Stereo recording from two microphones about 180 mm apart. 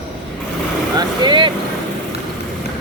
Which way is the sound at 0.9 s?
25° right (ahead or behind).